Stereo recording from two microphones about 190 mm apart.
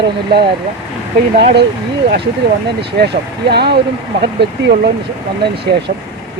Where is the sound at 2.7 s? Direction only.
60° right (ahead or behind).